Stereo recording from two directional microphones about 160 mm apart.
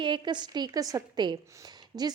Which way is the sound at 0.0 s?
30° right (ahead or behind).